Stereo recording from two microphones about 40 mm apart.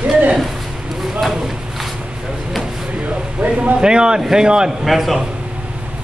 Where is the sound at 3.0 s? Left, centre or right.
Right.